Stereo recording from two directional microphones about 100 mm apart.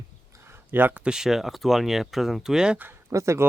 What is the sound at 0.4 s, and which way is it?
Speech, 20° right (ahead or behind).